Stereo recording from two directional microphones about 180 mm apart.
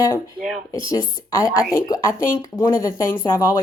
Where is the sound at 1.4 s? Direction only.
15° left (ahead or behind).